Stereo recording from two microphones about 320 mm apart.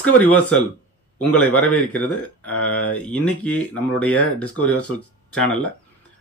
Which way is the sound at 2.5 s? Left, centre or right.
Left.